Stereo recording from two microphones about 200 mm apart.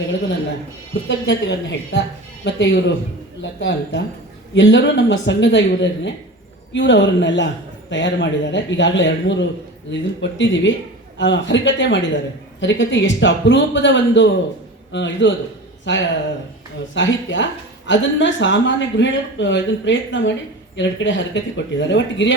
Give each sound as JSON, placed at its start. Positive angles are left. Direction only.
{"t": 1.0, "sound": "speech", "side_deg": 60}